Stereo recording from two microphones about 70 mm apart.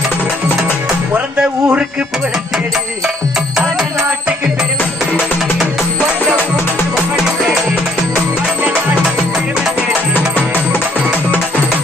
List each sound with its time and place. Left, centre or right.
1.4 s a man's voice: centre
10.2 s music: left